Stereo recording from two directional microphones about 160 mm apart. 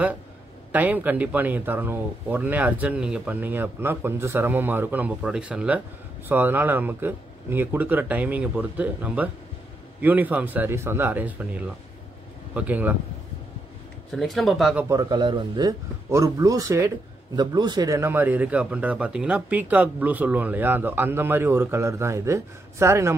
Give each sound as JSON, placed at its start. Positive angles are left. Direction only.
{"t": 0.7, "sound": "speech", "side_deg": -10}
{"t": 14.1, "sound": "speech", "side_deg": 0}
{"t": 14.8, "sound": "a man's voice", "side_deg": -20}